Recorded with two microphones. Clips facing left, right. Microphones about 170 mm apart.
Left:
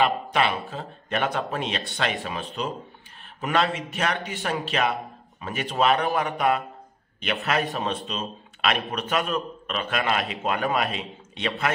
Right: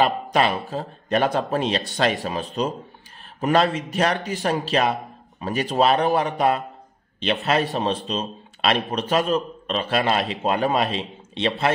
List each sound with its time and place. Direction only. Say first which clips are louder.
0.0 s a man's voice: right 3 dB; 40° right (ahead or behind)